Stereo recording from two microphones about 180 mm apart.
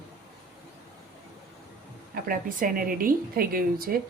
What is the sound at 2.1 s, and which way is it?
Speech, 50° right (ahead or behind).